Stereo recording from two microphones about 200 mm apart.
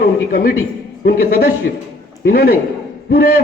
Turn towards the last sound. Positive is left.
turn(degrees=50)  # may be behind; listen again after turning